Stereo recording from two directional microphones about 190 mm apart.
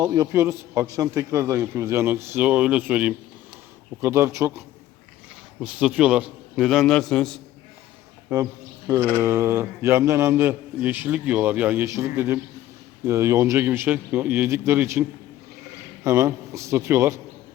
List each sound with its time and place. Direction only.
0.0 s a man's voice: 20° right (ahead or behind)
5.6 s a man's voice: 5° right (ahead or behind)
8.3 s a man's voice: 15° right (ahead or behind)
16.0 s a man's voice: 15° right (ahead or behind)